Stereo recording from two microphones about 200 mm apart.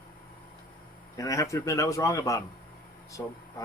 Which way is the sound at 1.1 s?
15° left (ahead or behind).